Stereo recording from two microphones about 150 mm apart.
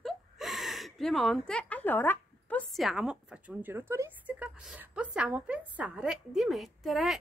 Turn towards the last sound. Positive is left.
turn(degrees=0)  # may be behind; listen again after turning